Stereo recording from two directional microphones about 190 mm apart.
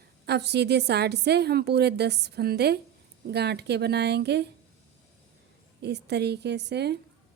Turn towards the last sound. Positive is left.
turn(degrees=-60)  # may be behind; listen again after turning